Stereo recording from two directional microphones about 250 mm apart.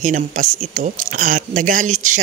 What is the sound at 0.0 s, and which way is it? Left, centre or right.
Speech, right.